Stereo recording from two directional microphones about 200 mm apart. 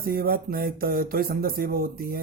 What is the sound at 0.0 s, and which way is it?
Mantra, 45° right (ahead or behind).